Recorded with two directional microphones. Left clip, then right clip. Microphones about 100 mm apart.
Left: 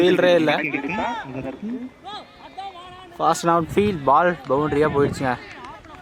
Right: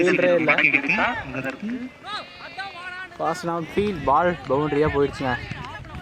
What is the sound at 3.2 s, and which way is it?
Speech, 55° left (ahead or behind).